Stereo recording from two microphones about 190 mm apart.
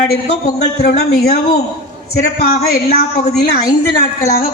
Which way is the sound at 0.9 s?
55° left (ahead or behind).